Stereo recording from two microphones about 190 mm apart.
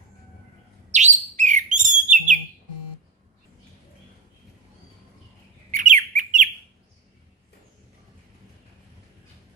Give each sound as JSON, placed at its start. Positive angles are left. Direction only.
{"t": 0.9, "sound": "bird", "side_deg": -40}
{"t": 5.7, "sound": "bird", "side_deg": -45}